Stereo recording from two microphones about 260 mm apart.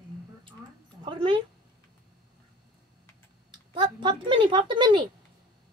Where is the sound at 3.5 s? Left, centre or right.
Centre.